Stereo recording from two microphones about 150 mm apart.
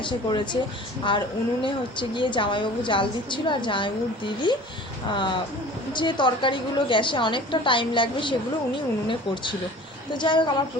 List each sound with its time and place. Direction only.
0.0 s a woman's voice: 30° left (ahead or behind)
1.6 s a woman's voice: 30° left (ahead or behind)